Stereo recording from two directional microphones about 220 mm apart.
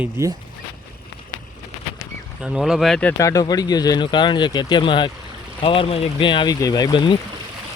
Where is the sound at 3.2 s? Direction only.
15° left (ahead or behind).